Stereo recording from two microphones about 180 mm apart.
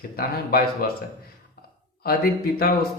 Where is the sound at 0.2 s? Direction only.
55° left (ahead or behind).